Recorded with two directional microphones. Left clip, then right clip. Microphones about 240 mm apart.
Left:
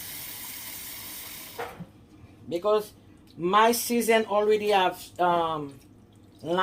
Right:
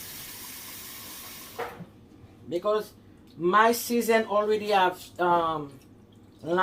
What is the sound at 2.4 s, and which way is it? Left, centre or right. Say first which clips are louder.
Speech: left 2 dB; left.